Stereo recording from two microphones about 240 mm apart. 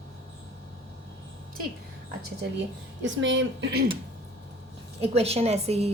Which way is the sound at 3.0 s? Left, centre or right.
Right.